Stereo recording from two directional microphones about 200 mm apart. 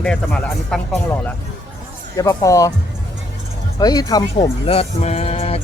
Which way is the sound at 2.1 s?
15° left (ahead or behind).